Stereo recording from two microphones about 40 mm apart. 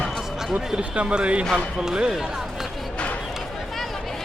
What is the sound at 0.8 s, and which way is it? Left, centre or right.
Speech, right.